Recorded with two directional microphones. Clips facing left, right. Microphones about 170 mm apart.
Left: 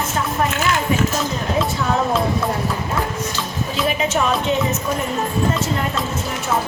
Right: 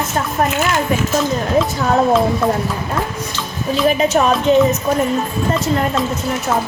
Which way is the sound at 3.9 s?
40° right (ahead or behind).